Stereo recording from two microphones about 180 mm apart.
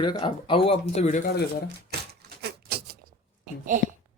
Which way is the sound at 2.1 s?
65° right (ahead or behind).